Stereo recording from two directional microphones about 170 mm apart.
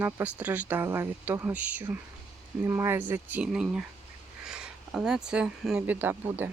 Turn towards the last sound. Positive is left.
turn(degrees=-10)  # may be behind; listen again after turning